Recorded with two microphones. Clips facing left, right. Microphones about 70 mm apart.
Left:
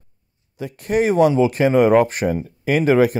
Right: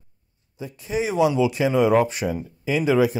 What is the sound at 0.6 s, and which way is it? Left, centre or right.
Speech, left.